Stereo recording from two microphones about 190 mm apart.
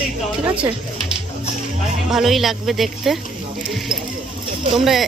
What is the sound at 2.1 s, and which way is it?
A woman's voice, centre (ahead or behind).